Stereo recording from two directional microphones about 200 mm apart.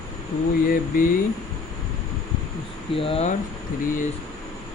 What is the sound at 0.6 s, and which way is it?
Speech, 45° left (ahead or behind).